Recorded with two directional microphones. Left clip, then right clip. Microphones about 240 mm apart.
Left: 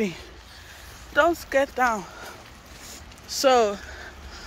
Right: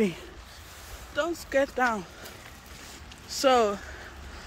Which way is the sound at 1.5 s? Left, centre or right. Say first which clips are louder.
Left 3 dB; centre.